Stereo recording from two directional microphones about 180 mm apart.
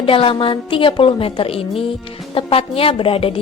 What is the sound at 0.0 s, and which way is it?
A woman's voice, 30° left (ahead or behind).